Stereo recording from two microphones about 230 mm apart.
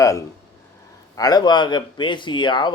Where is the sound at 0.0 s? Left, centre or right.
Centre.